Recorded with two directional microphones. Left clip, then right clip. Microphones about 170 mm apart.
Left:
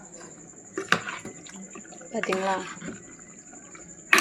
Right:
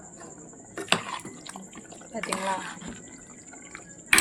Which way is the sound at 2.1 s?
20° left (ahead or behind).